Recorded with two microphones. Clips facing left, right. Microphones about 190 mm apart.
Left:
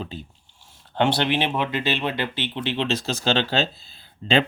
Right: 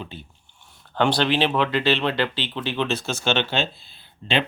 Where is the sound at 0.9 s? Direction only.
20° left (ahead or behind).